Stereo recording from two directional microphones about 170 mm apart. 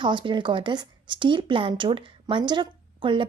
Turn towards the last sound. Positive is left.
turn(degrees=-30)  # may be behind; listen again after turning